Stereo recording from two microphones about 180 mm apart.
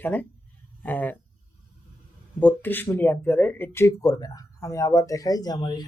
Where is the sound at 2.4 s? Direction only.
10° left (ahead or behind).